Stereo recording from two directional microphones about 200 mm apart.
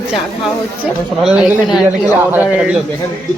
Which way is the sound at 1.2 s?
5° right (ahead or behind).